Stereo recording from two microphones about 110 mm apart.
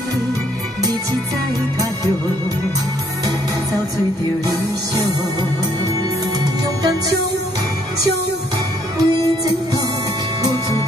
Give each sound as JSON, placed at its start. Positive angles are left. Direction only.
{"t": 8.9, "sound": "music", "side_deg": -35}